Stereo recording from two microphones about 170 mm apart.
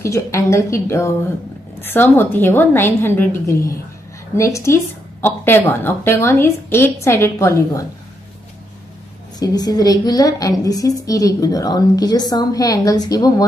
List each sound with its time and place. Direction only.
0.0 s a woman's voice: 15° left (ahead or behind)
9.4 s a woman's voice: 25° left (ahead or behind)